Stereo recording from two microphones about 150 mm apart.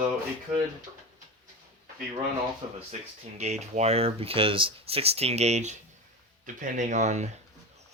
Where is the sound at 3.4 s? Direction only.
50° right (ahead or behind).